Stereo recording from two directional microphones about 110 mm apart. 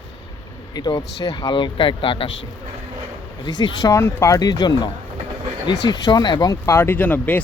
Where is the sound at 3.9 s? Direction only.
25° left (ahead or behind).